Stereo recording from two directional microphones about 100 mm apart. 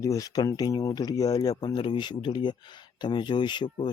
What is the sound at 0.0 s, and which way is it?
Speech, 35° left (ahead or behind).